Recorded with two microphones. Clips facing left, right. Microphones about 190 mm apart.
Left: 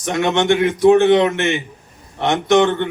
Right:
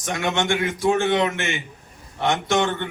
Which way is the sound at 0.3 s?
20° left (ahead or behind).